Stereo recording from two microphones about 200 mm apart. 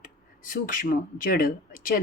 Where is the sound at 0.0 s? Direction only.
45° left (ahead or behind).